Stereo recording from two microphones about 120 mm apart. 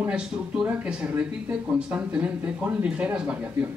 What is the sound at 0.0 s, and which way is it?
Speech, 10° right (ahead or behind).